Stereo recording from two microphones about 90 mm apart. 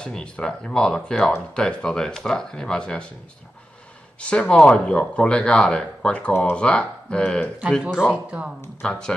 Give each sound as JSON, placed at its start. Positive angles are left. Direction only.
{"t": 0.0, "sound": "speech", "side_deg": 10}
{"t": 4.2, "sound": "speech", "side_deg": 10}
{"t": 7.8, "sound": "speech", "side_deg": -10}
{"t": 8.8, "sound": "speech", "side_deg": 10}